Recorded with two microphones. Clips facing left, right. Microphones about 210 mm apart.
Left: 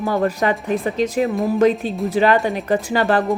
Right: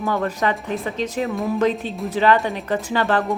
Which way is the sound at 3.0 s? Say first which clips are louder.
Left 2 dB; 40° left (ahead or behind).